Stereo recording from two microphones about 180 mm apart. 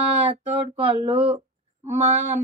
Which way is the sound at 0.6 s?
30° right (ahead or behind).